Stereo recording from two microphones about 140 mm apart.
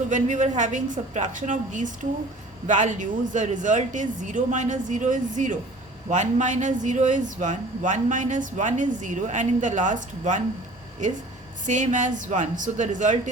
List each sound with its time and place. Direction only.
0.1 s speech: 60° right (ahead or behind)
11.6 s speech: 65° right (ahead or behind)